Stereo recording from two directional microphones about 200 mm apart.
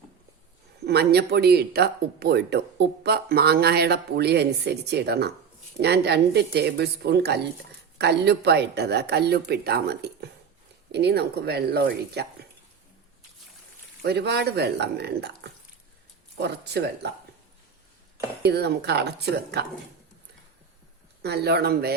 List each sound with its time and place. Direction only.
0.9 s speech: 55° right (ahead or behind)
14.0 s speech: 55° right (ahead or behind)
16.4 s speech: 55° right (ahead or behind)
18.4 s speech: 55° right (ahead or behind)
21.2 s speech: 55° right (ahead or behind)